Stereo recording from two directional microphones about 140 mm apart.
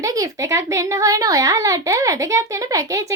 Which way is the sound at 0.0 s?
25° right (ahead or behind).